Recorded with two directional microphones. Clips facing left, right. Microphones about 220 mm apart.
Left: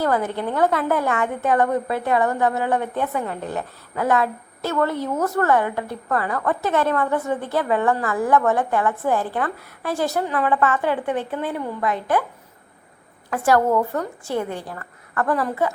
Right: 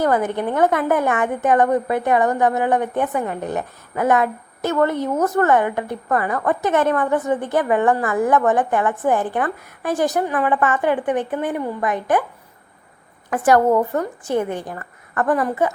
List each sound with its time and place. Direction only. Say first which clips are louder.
0.0 s a woman's voice: right 3 dB; 20° right (ahead or behind)
13.3 s a woman's voice: right 3 dB; 20° right (ahead or behind)